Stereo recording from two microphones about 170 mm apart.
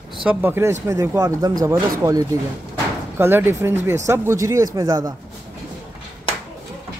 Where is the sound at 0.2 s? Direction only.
10° right (ahead or behind).